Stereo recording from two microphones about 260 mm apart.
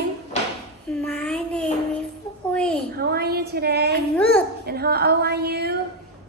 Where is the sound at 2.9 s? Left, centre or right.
Right.